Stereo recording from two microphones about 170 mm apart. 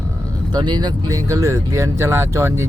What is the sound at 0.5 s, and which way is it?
Speech, 25° right (ahead or behind).